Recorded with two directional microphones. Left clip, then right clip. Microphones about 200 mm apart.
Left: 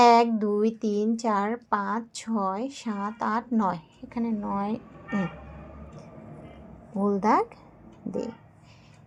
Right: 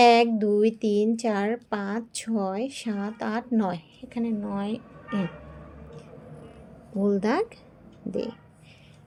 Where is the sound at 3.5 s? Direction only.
30° right (ahead or behind).